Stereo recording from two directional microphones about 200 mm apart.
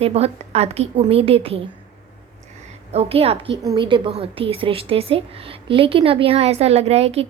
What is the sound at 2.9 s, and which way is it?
A woman's voice, 30° right (ahead or behind).